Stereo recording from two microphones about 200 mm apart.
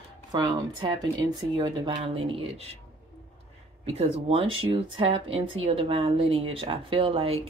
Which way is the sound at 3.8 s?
30° right (ahead or behind).